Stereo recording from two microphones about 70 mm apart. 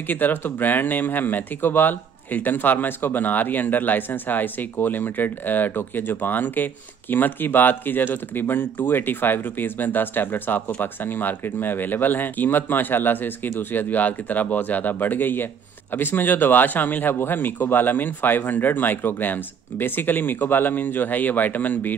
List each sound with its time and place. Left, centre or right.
0.1 s speech: left